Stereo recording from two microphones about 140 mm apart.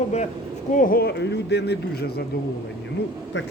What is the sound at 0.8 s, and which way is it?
Speech, 90° left.